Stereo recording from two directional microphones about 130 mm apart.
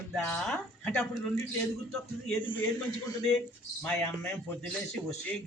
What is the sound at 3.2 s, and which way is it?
Speech, 5° left (ahead or behind).